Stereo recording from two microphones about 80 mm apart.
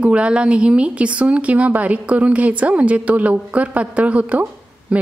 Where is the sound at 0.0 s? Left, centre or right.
Centre.